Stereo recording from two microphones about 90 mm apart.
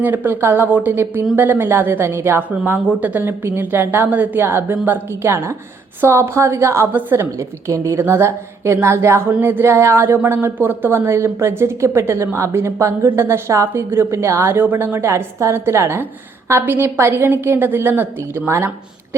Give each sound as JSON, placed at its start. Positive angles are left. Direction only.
{"t": 0.0, "sound": "a woman's voice", "side_deg": -20}